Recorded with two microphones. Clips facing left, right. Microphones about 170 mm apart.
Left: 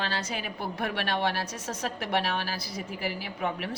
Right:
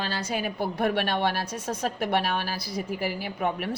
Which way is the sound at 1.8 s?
50° right (ahead or behind).